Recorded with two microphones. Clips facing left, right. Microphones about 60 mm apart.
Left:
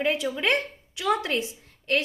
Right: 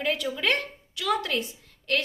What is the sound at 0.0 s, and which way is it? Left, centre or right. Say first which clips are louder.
A woman's voice: left 2 dB; left.